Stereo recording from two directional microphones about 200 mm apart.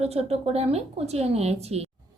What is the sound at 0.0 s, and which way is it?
A woman's voice, 30° right (ahead or behind).